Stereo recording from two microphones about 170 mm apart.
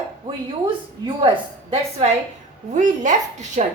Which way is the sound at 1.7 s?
35° right (ahead or behind).